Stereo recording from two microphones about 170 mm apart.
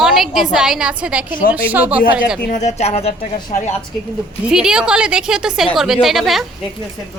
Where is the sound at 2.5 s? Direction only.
40° left (ahead or behind).